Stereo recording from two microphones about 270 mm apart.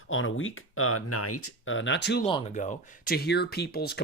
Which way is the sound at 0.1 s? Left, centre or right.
Left.